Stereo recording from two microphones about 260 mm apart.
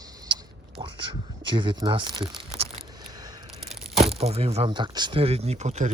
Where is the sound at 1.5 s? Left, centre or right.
Centre.